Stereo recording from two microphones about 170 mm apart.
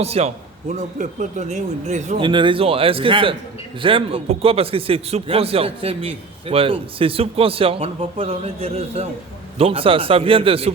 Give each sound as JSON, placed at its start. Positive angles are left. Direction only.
{"t": 0.0, "sound": "a man's voice", "side_deg": -35}
{"t": 0.7, "sound": "speech", "side_deg": -50}
{"t": 2.1, "sound": "a man's voice", "side_deg": -30}